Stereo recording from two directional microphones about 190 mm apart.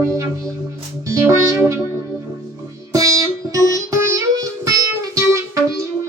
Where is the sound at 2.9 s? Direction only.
15° right (ahead or behind).